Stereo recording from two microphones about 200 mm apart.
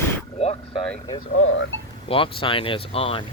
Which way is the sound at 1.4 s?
75° left (ahead or behind).